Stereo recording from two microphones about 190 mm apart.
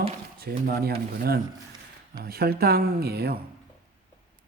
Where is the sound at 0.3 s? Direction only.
55° right (ahead or behind).